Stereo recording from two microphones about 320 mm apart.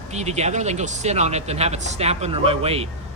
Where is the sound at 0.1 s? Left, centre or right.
Right.